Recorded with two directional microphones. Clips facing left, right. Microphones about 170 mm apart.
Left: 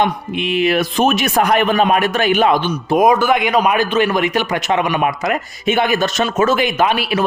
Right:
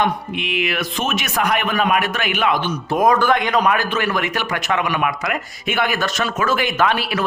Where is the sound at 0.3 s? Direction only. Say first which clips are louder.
Left 7 dB; 30° left (ahead or behind).